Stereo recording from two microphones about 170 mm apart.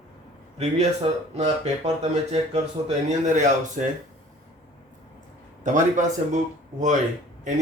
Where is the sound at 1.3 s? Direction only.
40° right (ahead or behind).